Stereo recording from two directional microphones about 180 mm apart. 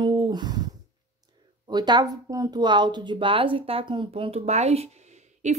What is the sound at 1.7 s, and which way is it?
A woman's voice, 25° right (ahead or behind).